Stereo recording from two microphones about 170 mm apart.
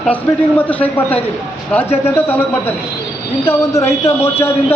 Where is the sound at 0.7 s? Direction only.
10° left (ahead or behind).